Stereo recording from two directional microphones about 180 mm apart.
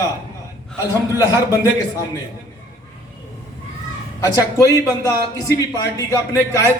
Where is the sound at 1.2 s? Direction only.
20° left (ahead or behind).